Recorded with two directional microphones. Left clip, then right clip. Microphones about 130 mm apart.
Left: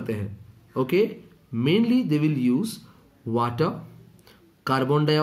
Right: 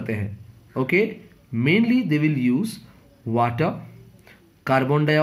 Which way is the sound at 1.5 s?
15° left (ahead or behind).